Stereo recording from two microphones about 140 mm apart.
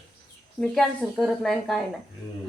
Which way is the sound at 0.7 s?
Centre (ahead or behind).